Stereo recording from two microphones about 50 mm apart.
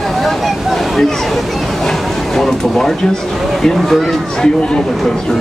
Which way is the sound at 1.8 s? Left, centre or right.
Centre.